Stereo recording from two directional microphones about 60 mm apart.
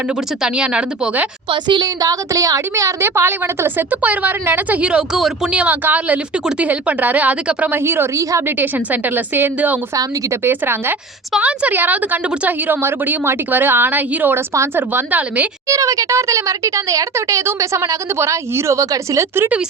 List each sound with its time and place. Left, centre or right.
0.4 s a woman's voice: centre
2.0 s speech: right
4.0 s a woman's voice: right
4.8 s speech: centre
5.5 s a woman's voice: right
7.7 s a woman's voice: right
8.1 s a woman's voice: right
8.4 s a woman's voice: right
9.9 s speech: right
10.4 s a woman's voice: right
11.3 s a woman's voice: right
15.6 s speech: right